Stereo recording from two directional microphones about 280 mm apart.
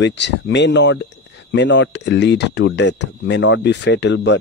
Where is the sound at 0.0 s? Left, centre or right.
Left.